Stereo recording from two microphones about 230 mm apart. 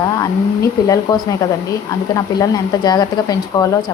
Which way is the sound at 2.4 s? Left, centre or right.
Centre.